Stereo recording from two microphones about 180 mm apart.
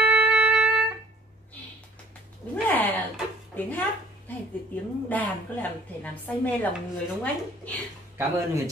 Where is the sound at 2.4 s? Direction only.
5° left (ahead or behind).